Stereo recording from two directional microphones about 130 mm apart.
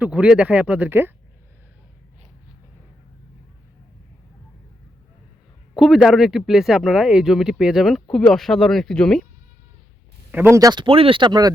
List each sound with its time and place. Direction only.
0.0 s speech: 10° right (ahead or behind)
5.9 s speech: 5° right (ahead or behind)
10.3 s speech: 15° right (ahead or behind)
10.6 s speech: 35° right (ahead or behind)